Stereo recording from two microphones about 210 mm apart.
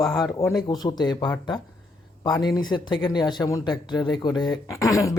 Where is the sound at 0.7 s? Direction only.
20° left (ahead or behind).